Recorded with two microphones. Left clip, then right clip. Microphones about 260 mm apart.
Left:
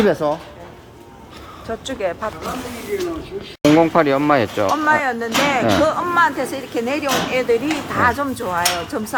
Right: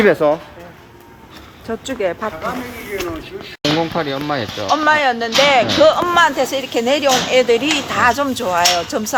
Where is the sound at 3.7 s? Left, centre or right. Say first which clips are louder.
Left 7 dB; left.